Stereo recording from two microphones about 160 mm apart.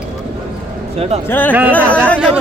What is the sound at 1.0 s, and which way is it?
Speech, 40° right (ahead or behind).